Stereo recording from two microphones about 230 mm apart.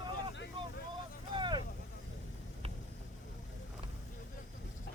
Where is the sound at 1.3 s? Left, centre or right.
Centre.